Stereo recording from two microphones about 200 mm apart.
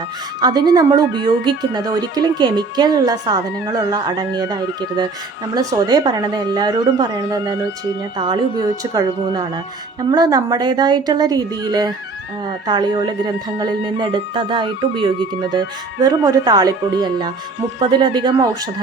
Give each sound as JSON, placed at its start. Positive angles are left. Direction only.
{"t": 0.4, "sound": "speech", "side_deg": -20}